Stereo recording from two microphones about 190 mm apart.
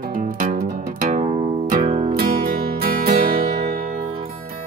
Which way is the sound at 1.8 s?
30° right (ahead or behind).